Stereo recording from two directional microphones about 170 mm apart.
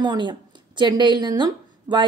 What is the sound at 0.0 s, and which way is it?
A woman's voice, 25° right (ahead or behind).